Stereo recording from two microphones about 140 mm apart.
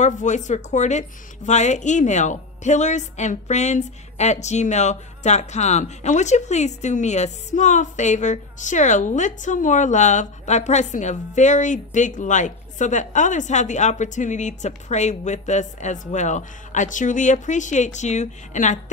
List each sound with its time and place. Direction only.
0.0 s speech: 60° left (ahead or behind)